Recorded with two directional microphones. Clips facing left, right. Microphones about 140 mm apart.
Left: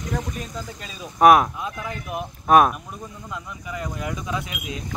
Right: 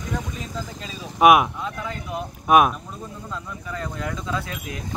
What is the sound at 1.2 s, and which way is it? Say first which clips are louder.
Speech: left 1 dB; 5° right (ahead or behind).